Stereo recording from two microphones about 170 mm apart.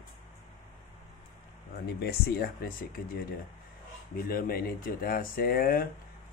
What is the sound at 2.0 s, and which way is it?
Speech, 70° left (ahead or behind).